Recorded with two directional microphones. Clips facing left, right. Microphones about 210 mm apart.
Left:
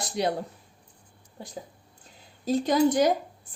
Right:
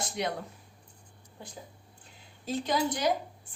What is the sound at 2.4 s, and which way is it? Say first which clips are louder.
Speech: left 8 dB; 40° left (ahead or behind).